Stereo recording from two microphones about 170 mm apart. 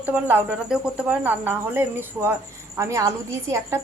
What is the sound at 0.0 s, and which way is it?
Speech, 10° right (ahead or behind).